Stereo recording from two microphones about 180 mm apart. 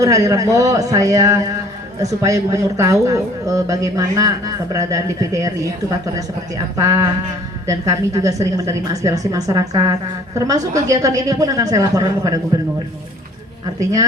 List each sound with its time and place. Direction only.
0.0 s speech: 20° right (ahead or behind)
6.7 s a woman's voice: 15° right (ahead or behind)